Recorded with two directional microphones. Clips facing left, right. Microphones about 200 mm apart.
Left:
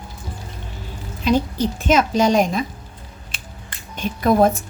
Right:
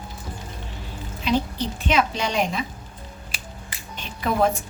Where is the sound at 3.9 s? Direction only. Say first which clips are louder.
Left 8 dB; 45° left (ahead or behind).